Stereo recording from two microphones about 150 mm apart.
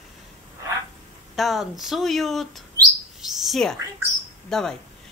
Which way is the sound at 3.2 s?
Centre (ahead or behind).